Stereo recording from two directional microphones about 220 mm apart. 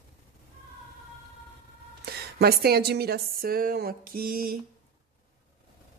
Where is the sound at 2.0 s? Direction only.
45° right (ahead or behind).